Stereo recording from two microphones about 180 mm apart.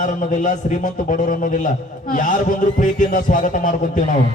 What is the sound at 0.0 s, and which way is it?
A man's voice, 45° left (ahead or behind).